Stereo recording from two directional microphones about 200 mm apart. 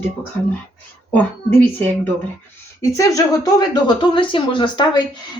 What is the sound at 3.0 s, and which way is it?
Speech, 15° left (ahead or behind).